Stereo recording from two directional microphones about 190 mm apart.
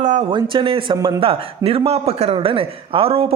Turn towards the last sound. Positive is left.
turn(degrees=-30)  # may be behind; listen again after turning